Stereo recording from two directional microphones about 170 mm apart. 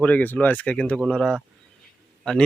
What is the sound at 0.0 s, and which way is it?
Speech, 10° left (ahead or behind).